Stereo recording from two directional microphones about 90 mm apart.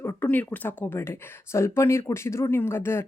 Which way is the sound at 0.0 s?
30° left (ahead or behind).